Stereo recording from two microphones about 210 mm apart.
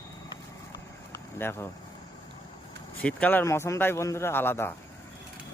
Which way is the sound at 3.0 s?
10° left (ahead or behind).